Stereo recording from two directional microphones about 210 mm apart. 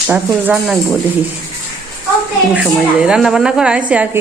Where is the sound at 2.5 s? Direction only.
5° right (ahead or behind).